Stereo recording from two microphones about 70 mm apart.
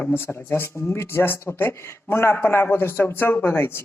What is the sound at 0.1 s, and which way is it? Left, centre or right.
A woman's voice, left.